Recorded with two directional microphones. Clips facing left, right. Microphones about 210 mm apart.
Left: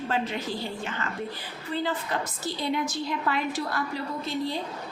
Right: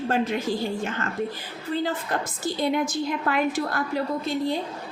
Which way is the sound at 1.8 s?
50° right (ahead or behind).